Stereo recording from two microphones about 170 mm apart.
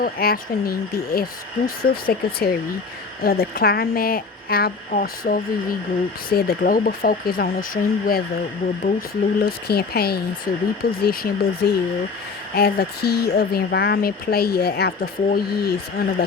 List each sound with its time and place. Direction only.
0.0 s speech: 65° left (ahead or behind)